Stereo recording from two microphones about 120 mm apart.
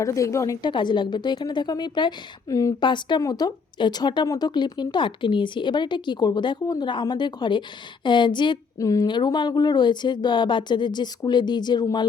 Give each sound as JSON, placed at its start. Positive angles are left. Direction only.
{"t": 0.0, "sound": "a woman's voice", "side_deg": 25}
{"t": 0.7, "sound": "speech", "side_deg": 40}
{"t": 2.8, "sound": "speech", "side_deg": 40}
{"t": 8.8, "sound": "a woman's voice", "side_deg": 30}
{"t": 9.0, "sound": "speech", "side_deg": 40}